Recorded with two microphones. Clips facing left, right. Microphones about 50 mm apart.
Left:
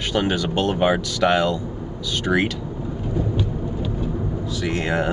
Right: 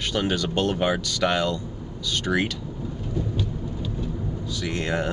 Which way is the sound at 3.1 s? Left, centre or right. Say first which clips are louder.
Left 5 dB; centre.